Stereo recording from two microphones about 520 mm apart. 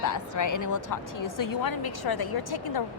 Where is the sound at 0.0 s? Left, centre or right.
Left.